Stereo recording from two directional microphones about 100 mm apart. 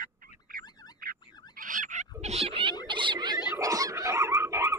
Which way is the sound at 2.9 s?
55° right (ahead or behind).